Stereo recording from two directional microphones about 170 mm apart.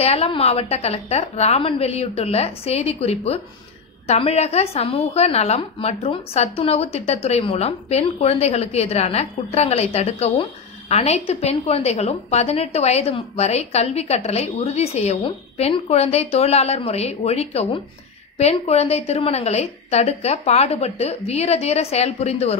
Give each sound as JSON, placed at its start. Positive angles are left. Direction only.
{"t": 0.0, "sound": "a woman's voice", "side_deg": 35}